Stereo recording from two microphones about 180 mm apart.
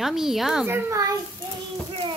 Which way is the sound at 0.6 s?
15° right (ahead or behind).